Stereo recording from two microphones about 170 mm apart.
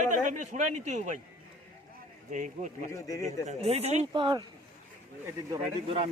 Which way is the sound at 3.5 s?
40° right (ahead or behind).